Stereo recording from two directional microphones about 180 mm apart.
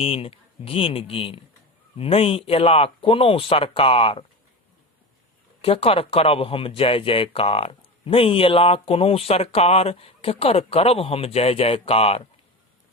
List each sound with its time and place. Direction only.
0.0 s speech: 30° left (ahead or behind)
5.6 s speech: 30° left (ahead or behind)